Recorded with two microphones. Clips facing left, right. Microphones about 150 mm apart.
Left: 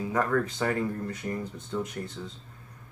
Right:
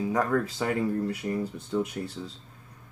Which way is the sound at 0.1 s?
10° right (ahead or behind).